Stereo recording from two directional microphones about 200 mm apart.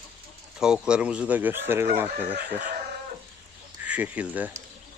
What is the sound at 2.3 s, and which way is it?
Speech, 50° right (ahead or behind).